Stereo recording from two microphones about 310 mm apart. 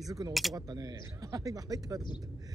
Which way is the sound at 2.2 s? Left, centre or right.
Centre.